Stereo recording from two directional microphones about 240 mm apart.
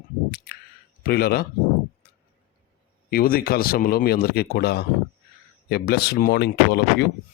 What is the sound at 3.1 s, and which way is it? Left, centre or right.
A man's voice, left.